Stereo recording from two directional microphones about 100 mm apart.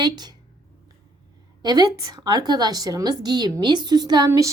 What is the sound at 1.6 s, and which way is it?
A woman's voice, 45° right (ahead or behind).